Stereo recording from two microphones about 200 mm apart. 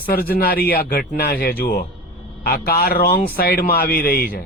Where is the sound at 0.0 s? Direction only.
50° left (ahead or behind).